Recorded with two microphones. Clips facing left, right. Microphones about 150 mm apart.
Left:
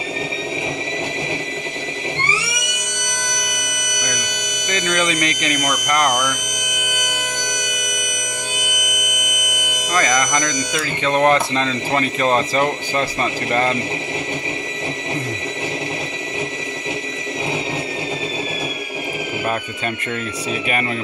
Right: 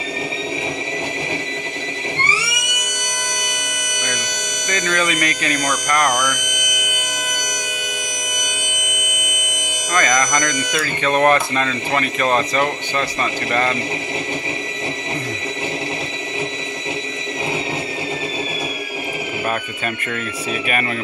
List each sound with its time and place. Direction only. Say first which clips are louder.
4.6 s music: even; 20° left (ahead or behind)
5.2 s speech: even; 20° left (ahead or behind)
5.9 s a sound: even; 25° left (ahead or behind)
9.8 s speech: even; 15° left (ahead or behind)